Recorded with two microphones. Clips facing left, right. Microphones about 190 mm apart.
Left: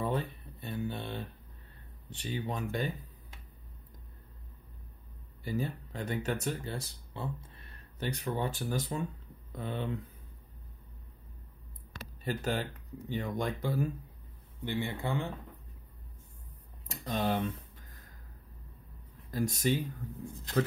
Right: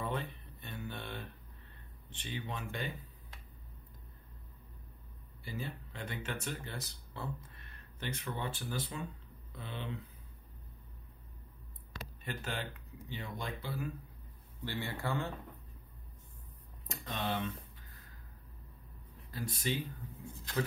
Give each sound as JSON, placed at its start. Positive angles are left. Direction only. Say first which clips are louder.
{"t": 0.0, "sound": "a sound", "louder": "left 5 dB", "side_deg": 35}
{"t": 2.0, "sound": "speech", "louder": "left 6 dB", "side_deg": 40}
{"t": 5.4, "sound": "speech", "louder": "left 8 dB", "side_deg": 45}
{"t": 12.3, "sound": "speech", "louder": "left 8 dB", "side_deg": 40}
{"t": 14.6, "sound": "speech", "louder": "left 5 dB", "side_deg": 15}
{"t": 16.8, "sound": "a sound", "louder": "left 6 dB", "side_deg": 35}
{"t": 19.3, "sound": "speech", "louder": "left 7 dB", "side_deg": 45}